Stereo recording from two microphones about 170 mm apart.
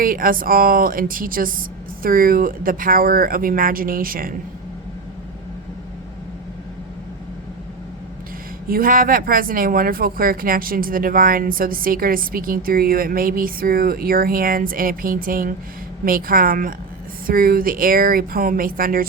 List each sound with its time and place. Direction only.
0.0 s speech: 55° right (ahead or behind)
8.7 s speech: 55° right (ahead or behind)